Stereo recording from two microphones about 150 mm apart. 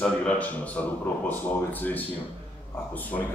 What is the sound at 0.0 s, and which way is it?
A man's voice, 5° left (ahead or behind).